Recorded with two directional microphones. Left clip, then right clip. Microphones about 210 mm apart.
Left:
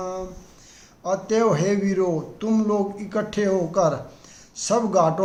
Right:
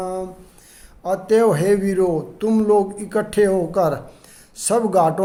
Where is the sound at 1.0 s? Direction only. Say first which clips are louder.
Right 4 dB; 40° right (ahead or behind).